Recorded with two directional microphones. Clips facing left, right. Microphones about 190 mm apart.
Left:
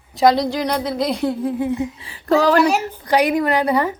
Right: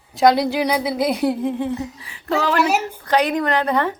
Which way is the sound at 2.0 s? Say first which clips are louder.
Left 7 dB; 35° left (ahead or behind).